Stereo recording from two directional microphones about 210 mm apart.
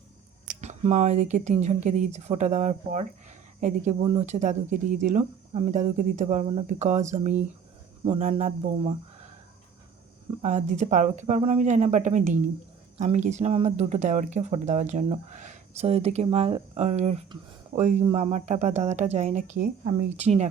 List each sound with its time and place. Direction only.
0.4 s speech: 35° right (ahead or behind)
10.4 s speech: 35° right (ahead or behind)